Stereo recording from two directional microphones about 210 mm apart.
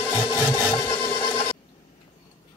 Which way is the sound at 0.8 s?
10° left (ahead or behind).